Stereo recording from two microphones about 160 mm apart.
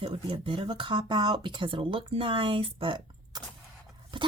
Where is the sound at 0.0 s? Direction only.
35° right (ahead or behind).